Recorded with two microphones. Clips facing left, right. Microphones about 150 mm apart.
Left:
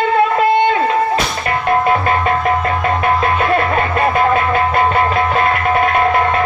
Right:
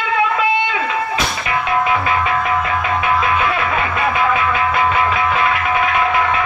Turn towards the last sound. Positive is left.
turn(degrees=45)  # may be behind; listen again after turning